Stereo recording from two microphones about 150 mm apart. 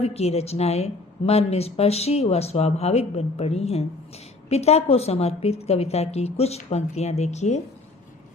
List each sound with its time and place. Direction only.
0.0 s a woman's voice: 45° left (ahead or behind)